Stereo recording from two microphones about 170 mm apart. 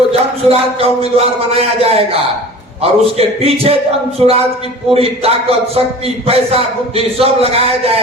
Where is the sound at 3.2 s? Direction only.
35° right (ahead or behind).